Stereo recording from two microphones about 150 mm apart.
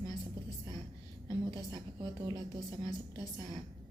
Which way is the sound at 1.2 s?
25° right (ahead or behind).